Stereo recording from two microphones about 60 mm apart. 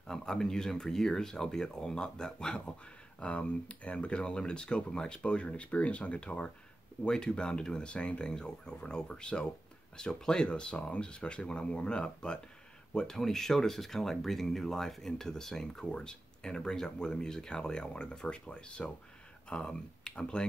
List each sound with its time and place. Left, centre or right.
0.0 s speech: centre